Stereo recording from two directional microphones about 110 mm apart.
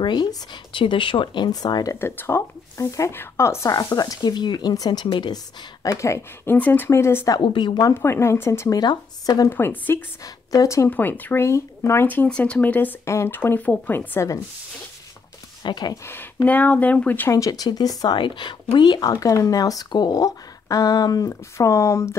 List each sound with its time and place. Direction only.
0.0 s speech: 40° left (ahead or behind)
2.0 s speech: 20° left (ahead or behind)
7.3 s speech: 45° left (ahead or behind)
7.8 s speech: 25° left (ahead or behind)
9.6 s speech: 20° left (ahead or behind)
10.2 s speech: 35° left (ahead or behind)
10.9 s speech: 15° left (ahead or behind)
15.6 s speech: 40° left (ahead or behind)
16.4 s speech: 15° left (ahead or behind)
17.3 s speech: 30° left (ahead or behind)